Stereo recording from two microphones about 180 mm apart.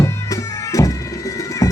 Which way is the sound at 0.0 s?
15° left (ahead or behind).